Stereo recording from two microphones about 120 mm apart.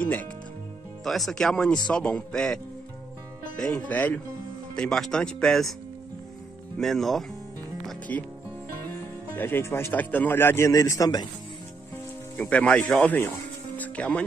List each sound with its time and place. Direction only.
0.0 s speech: 15° left (ahead or behind)
1.0 s speech: centre (ahead or behind)
6.8 s speech: centre (ahead or behind)
8.1 s speech: 15° left (ahead or behind)
9.3 s speech: 15° left (ahead or behind)
12.4 s speech: 10° left (ahead or behind)